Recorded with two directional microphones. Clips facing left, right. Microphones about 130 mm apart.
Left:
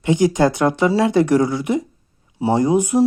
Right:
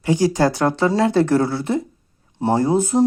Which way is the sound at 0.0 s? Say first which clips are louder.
Left 2 dB; 20° left (ahead or behind).